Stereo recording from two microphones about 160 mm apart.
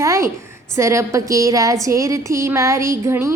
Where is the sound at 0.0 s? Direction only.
20° right (ahead or behind).